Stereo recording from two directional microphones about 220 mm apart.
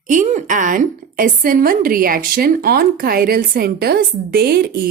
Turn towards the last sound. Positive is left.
turn(degrees=-45)  # may be behind; listen again after turning